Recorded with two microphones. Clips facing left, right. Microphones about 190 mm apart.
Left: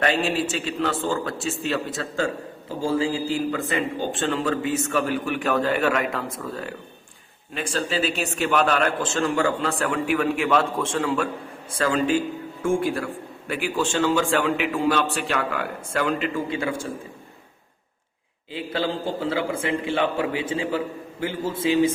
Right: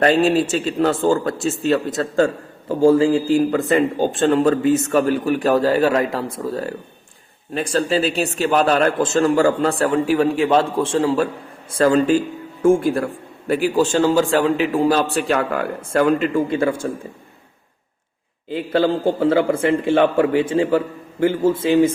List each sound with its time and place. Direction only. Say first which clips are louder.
0.0 s speech: right 8 dB; 40° right (ahead or behind)
18.4 s a man's voice: right 8 dB; 50° right (ahead or behind)